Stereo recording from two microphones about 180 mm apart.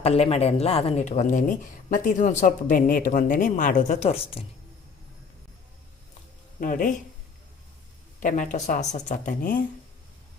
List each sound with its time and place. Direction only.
0.0 s speech: 35° left (ahead or behind)
6.6 s speech: 50° left (ahead or behind)
8.2 s speech: 45° left (ahead or behind)